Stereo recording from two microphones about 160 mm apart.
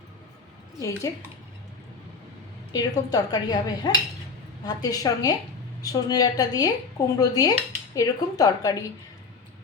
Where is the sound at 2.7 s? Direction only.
25° left (ahead or behind).